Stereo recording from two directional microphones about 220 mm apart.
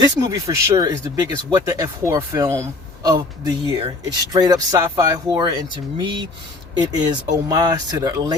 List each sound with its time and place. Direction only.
0.0 s speech: 15° right (ahead or behind)